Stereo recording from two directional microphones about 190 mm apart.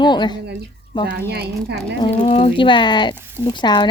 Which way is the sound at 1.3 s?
60° right (ahead or behind).